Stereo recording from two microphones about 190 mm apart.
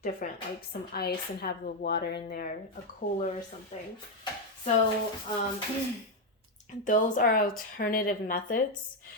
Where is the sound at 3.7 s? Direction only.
35° left (ahead or behind).